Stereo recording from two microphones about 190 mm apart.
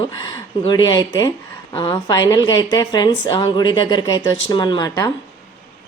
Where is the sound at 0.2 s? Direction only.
25° left (ahead or behind).